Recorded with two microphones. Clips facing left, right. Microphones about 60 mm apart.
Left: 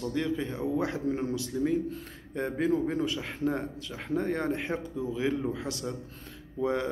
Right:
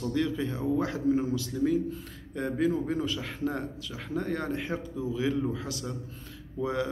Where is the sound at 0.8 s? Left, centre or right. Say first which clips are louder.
Right 3 dB; left.